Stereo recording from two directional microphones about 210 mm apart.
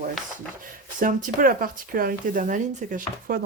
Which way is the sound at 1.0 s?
40° right (ahead or behind).